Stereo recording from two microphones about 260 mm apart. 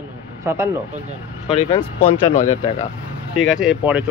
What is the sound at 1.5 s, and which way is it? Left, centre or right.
Speech, left.